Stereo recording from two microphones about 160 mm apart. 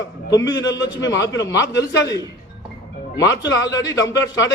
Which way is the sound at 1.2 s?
20° left (ahead or behind).